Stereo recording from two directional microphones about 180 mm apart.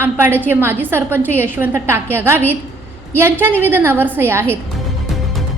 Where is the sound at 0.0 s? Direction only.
10° right (ahead or behind).